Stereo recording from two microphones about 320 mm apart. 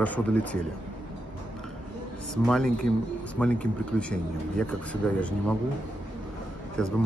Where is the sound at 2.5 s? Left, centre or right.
Centre.